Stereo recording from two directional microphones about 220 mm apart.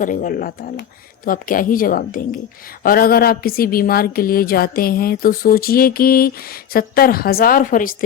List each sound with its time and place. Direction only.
0.0 s speech: 35° left (ahead or behind)